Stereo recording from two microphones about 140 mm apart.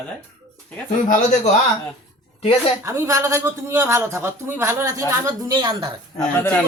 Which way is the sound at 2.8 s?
20° right (ahead or behind).